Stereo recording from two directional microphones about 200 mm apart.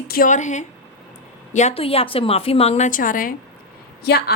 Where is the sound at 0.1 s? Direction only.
40° left (ahead or behind).